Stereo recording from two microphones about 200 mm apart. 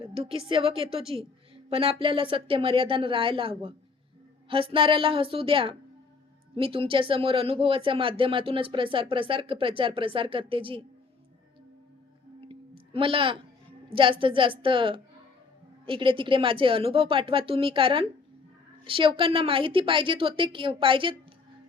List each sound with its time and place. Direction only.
0.0 s speech: 30° right (ahead or behind)
12.5 s a sound: 25° right (ahead or behind)
13.9 s speech: 25° right (ahead or behind)